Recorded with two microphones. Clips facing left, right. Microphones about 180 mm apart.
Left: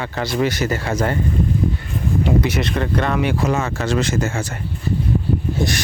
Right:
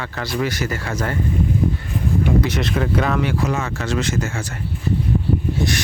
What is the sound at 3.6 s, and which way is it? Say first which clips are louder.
Speech: left 2 dB; 30° left (ahead or behind).